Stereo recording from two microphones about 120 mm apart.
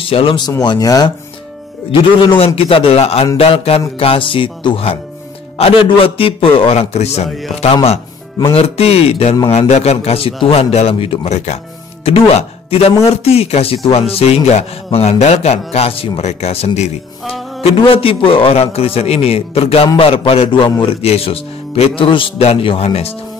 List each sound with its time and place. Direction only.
0.0 s speech: 50° left (ahead or behind)
0.5 s speech: 30° left (ahead or behind)
2.4 s a man's voice: 50° left (ahead or behind)
7.2 s music: centre (ahead or behind)
7.7 s speech: 55° left (ahead or behind)
11.3 s speech: 70° left (ahead or behind)
17.8 s a man's voice: 50° left (ahead or behind)